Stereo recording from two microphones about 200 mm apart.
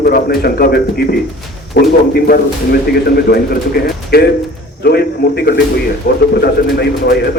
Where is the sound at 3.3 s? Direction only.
50° left (ahead or behind).